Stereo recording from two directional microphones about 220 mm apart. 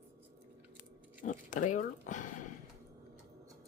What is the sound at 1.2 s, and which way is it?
Speech, 35° left (ahead or behind).